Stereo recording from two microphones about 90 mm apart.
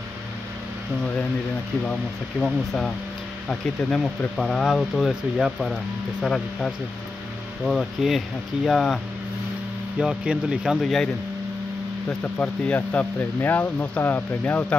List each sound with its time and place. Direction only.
2.4 s speech: 5° left (ahead or behind)
4.4 s speech: 5° left (ahead or behind)
9.9 s speech: 10° right (ahead or behind)
10.8 s speech: 5° left (ahead or behind)
12.1 s speech: 15° left (ahead or behind)